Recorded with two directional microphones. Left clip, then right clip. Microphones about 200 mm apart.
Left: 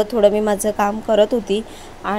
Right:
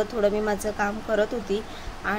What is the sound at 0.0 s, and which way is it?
A woman's voice, 35° left (ahead or behind).